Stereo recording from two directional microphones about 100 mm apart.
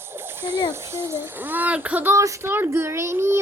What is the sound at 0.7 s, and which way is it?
Speech, 25° right (ahead or behind).